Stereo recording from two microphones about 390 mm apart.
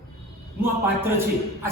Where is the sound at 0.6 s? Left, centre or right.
Centre.